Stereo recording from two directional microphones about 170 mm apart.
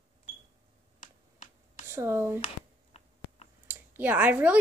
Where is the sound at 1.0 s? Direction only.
50° left (ahead or behind).